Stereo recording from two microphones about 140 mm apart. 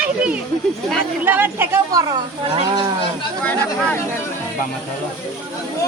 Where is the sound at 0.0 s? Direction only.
10° right (ahead or behind).